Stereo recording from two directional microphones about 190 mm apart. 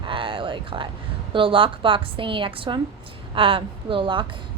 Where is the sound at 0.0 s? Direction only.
25° right (ahead or behind).